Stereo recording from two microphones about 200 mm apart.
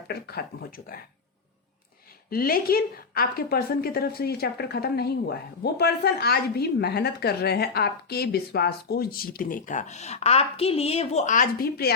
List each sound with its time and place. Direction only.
0.1 s a woman's voice: 50° left (ahead or behind)
2.3 s a woman's voice: 50° left (ahead or behind)